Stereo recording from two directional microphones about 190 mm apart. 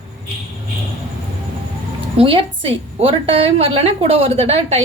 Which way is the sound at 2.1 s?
30° right (ahead or behind).